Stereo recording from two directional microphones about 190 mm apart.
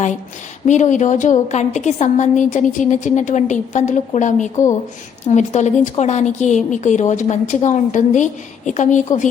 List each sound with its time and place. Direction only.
0.7 s a woman's voice: 40° left (ahead or behind)